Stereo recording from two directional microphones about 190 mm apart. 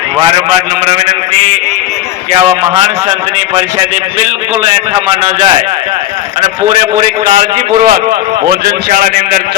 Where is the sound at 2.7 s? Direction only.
30° right (ahead or behind).